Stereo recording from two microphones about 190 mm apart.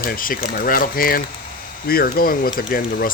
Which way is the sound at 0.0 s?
50° left (ahead or behind).